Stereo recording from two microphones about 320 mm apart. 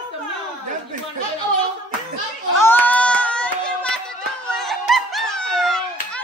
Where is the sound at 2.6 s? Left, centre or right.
Centre.